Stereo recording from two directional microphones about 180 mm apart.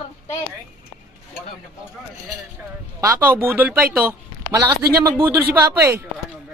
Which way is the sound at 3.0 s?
15° right (ahead or behind).